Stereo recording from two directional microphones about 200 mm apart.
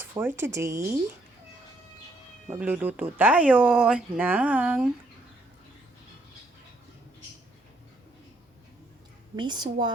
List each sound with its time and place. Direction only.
0.0 s speech: 10° right (ahead or behind)
2.5 s speech: 5° right (ahead or behind)
9.3 s a woman's voice: 20° right (ahead or behind)